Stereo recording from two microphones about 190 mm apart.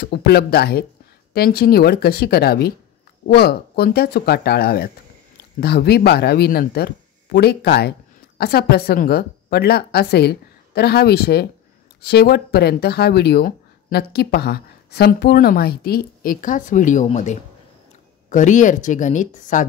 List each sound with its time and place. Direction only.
0.0 s speech: 55° left (ahead or behind); by 19.6 s 40° left (ahead or behind)